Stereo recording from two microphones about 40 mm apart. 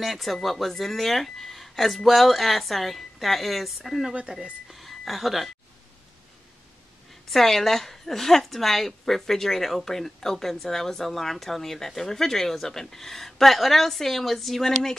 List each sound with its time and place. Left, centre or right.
0.0 s speech: centre
4.3 s speech: centre
4.6 s a sound: centre
7.2 s a woman's voice: centre